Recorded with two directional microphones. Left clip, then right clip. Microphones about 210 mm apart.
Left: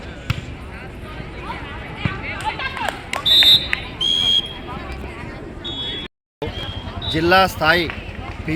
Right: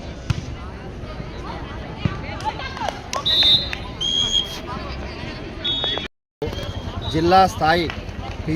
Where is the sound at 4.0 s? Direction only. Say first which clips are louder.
Left 3 dB; 30° left (ahead or behind).